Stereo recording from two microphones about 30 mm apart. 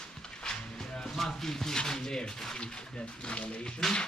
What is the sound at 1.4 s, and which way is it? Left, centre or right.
Speech, centre.